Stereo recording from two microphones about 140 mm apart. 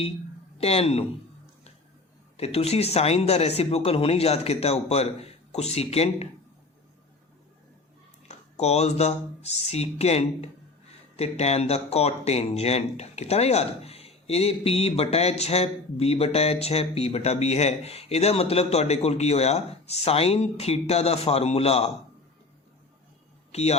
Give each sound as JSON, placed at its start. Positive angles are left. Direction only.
{"t": 0.6, "sound": "speech", "side_deg": 45}
{"t": 2.4, "sound": "speech", "side_deg": 45}
{"t": 8.3, "sound": "speech", "side_deg": 50}
{"t": 23.5, "sound": "speech", "side_deg": 50}